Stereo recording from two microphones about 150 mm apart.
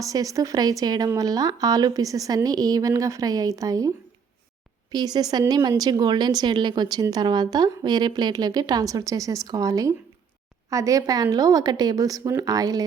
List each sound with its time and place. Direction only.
0.0 s speech: 20° right (ahead or behind)